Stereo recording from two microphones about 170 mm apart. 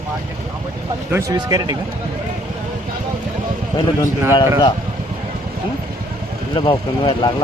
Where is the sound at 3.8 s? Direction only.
25° left (ahead or behind).